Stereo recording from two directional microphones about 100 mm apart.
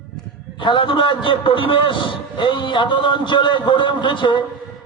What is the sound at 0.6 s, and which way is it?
A man's voice, 55° left (ahead or behind).